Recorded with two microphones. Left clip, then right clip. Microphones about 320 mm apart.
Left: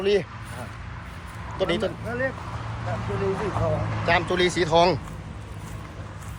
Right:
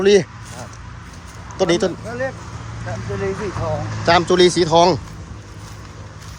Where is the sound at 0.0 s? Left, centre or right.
Right.